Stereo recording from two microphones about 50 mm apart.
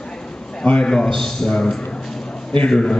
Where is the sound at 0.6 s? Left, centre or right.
Centre.